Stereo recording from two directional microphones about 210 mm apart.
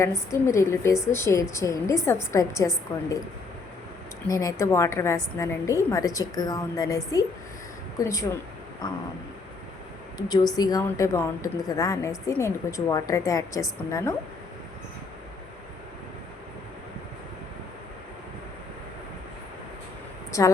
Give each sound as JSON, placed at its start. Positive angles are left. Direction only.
{"t": 0.0, "sound": "a woman's voice", "side_deg": 15}
{"t": 4.3, "sound": "a woman's voice", "side_deg": 15}
{"t": 10.2, "sound": "a woman's voice", "side_deg": 20}
{"t": 20.3, "sound": "a woman's voice", "side_deg": 15}